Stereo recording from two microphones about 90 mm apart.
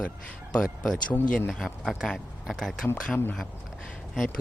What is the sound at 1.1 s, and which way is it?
Speech, 20° left (ahead or behind).